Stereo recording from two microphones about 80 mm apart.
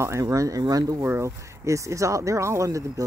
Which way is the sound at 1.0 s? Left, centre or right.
Right.